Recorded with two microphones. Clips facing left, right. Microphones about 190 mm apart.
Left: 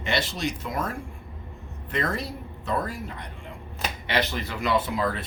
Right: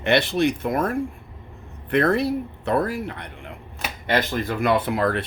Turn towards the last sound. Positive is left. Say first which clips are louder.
# right 4 dB
turn(degrees=-65)  # may be behind; listen again after turning